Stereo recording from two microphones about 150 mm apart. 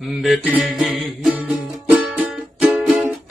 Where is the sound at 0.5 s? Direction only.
5° right (ahead or behind).